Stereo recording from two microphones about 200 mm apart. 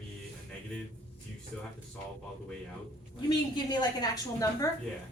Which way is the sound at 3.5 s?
20° left (ahead or behind).